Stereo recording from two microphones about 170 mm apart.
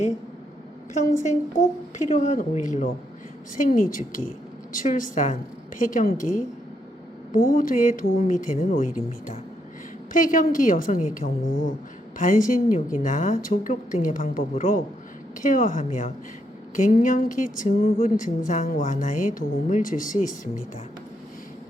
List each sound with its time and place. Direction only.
2.0 s speech: 45° left (ahead or behind)
10.1 s speech: 50° left (ahead or behind)